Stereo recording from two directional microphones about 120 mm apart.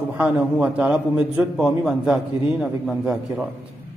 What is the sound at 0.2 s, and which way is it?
A man's voice, 10° right (ahead or behind).